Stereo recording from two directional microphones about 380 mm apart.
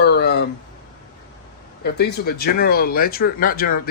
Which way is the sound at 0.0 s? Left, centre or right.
Left.